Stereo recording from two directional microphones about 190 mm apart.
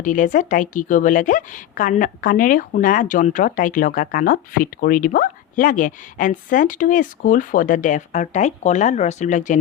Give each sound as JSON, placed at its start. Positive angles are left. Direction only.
{"t": 0.0, "sound": "speech", "side_deg": 40}